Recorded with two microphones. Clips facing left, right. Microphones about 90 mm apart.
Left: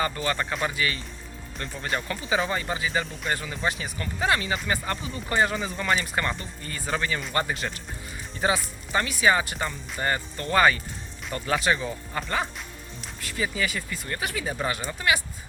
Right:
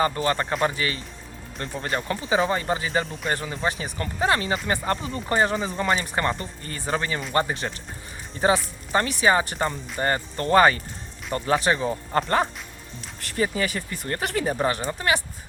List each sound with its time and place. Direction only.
0.0 s speech: 35° right (ahead or behind)
13.3 s speech: 40° right (ahead or behind)
14.5 s speech: 35° right (ahead or behind)